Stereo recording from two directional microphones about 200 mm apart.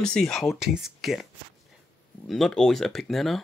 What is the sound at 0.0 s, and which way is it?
Speech, 5° left (ahead or behind).